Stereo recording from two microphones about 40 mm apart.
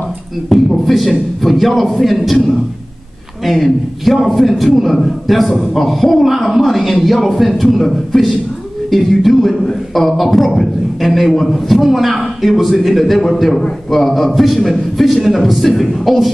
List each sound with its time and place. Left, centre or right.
0.5 s a man's voice: centre